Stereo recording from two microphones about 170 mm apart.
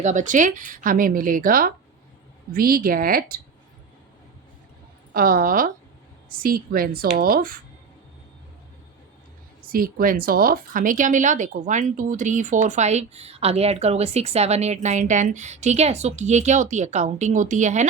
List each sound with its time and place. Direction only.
0.0 s a woman's voice: 45° right (ahead or behind)
5.1 s a woman's voice: 55° right (ahead or behind)
9.6 s speech: 55° right (ahead or behind)